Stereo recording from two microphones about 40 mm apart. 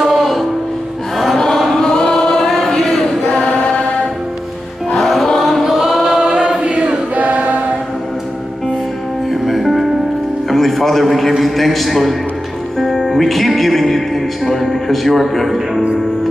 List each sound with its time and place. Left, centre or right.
0.0 s music: centre
1.8 s choir: centre
2.8 s chant: centre
4.9 s choir: centre
6.0 s choir: right
9.3 s music: centre
10.5 s a sound: centre
11.4 s a man's voice: centre
12.7 s music: centre